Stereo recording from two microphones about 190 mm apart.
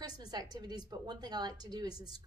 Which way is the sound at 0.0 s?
20° right (ahead or behind).